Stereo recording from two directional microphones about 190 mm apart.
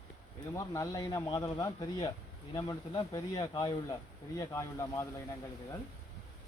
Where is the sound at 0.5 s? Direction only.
15° left (ahead or behind).